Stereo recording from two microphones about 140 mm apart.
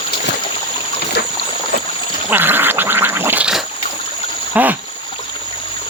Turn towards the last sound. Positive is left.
turn(degrees=-10)  # may be behind; listen again after turning